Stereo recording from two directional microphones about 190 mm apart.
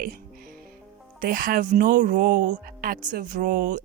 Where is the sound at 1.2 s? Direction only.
45° right (ahead or behind).